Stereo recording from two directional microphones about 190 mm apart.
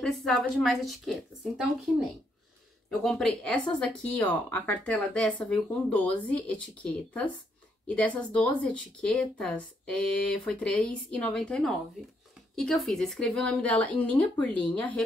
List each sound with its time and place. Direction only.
0.0 s speech: centre (ahead or behind)
2.9 s speech: centre (ahead or behind)